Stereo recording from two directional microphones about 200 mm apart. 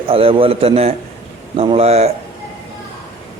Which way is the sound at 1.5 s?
30° right (ahead or behind).